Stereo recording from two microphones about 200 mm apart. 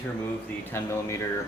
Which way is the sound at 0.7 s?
15° left (ahead or behind).